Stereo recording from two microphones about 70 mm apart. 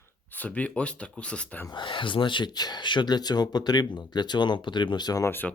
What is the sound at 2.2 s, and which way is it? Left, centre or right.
Speech, left.